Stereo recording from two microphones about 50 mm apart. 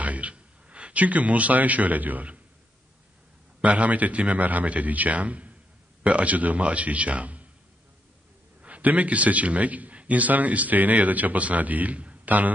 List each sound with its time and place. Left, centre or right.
0.0 s speech: right
3.6 s a man's voice: right
8.6 s a man's voice: right